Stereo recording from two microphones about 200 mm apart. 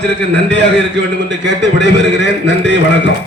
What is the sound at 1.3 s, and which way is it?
A man's voice, 60° right (ahead or behind).